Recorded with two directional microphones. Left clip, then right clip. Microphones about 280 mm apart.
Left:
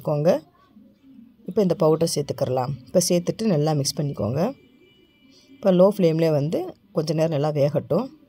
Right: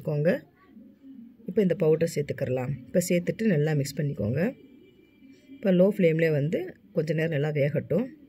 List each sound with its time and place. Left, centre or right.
0.0 s speech: centre
1.5 s speech: centre
5.6 s speech: centre